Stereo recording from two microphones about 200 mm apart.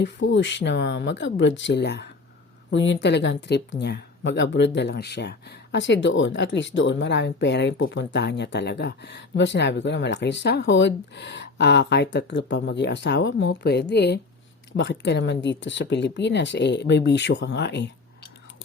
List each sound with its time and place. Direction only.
0.0 s speech: 60° left (ahead or behind)